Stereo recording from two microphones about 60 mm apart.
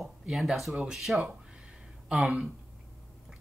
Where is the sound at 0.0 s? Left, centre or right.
Centre.